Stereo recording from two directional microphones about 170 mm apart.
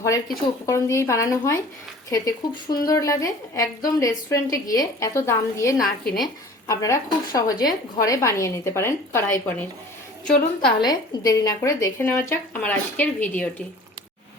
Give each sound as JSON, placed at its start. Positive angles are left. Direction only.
{"t": 0.6, "sound": "a woman's voice", "side_deg": 20}
{"t": 10.2, "sound": "a woman's voice", "side_deg": 55}
{"t": 10.8, "sound": "speech", "side_deg": 20}